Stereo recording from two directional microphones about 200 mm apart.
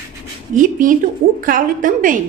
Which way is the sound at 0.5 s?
40° right (ahead or behind).